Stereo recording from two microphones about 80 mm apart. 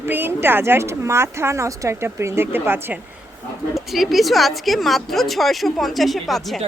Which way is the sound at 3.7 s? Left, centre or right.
Centre.